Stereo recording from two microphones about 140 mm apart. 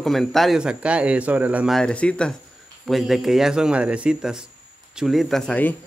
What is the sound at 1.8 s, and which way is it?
Speech, 10° left (ahead or behind).